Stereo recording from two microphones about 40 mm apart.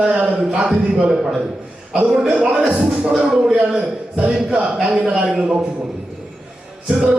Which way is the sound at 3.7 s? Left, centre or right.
Right.